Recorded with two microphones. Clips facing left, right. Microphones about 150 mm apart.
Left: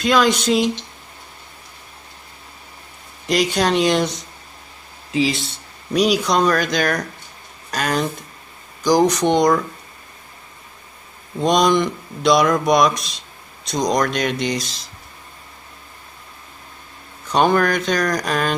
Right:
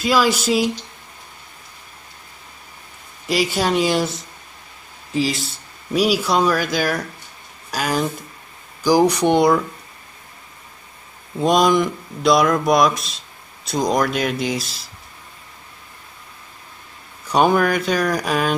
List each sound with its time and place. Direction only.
0.0 s speech: 5° right (ahead or behind)
3.3 s speech: 5° right (ahead or behind)
11.3 s speech: 5° right (ahead or behind)
17.3 s speech: 10° right (ahead or behind)